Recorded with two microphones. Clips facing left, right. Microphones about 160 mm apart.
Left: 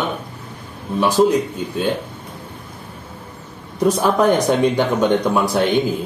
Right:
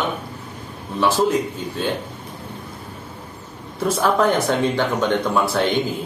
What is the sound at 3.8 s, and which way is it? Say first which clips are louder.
Speech: left 3 dB; 15° left (ahead or behind).